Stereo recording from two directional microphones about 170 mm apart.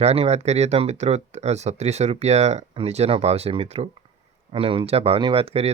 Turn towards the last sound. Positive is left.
turn(degrees=-35)  # may be behind; listen again after turning